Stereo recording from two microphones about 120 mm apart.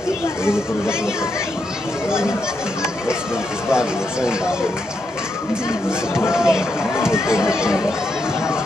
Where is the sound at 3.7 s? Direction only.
5° right (ahead or behind).